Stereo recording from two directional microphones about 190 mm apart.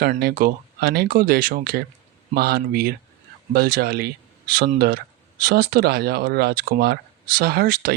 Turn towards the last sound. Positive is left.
turn(degrees=-50)  # may be behind; listen again after turning